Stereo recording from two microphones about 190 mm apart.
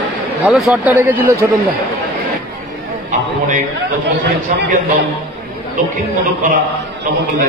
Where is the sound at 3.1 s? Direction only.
40° right (ahead or behind).